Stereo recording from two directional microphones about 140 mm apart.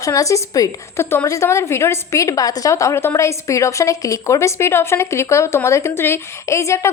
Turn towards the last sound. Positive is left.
turn(degrees=20)  # may be behind; listen again after turning